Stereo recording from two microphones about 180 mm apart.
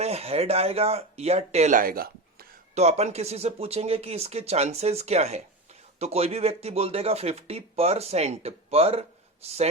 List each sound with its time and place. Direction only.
0.0 s speech: 35° right (ahead or behind); by 2.5 s 55° right (ahead or behind)
2.7 s speech: 35° right (ahead or behind)